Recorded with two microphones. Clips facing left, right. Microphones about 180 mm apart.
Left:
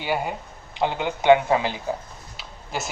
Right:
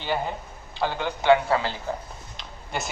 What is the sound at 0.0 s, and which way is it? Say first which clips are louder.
A man's voice: left 2 dB; 10° left (ahead or behind).